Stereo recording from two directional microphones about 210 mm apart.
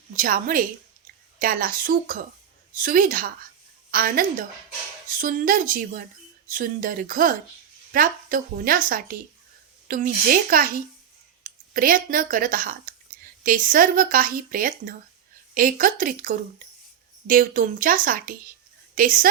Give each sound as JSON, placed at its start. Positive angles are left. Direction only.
{"t": 0.2, "sound": "speech", "side_deg": -40}